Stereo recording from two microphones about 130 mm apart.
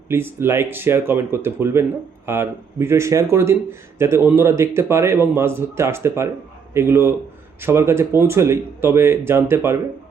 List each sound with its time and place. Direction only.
0.1 s speech: 15° right (ahead or behind)